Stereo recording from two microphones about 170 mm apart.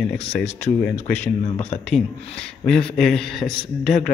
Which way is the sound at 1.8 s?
5° left (ahead or behind).